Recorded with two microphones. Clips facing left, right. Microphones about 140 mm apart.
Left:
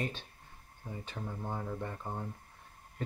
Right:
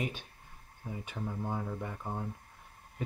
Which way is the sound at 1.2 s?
10° right (ahead or behind).